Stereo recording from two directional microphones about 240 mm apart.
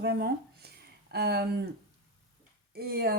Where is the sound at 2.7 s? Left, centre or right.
Right.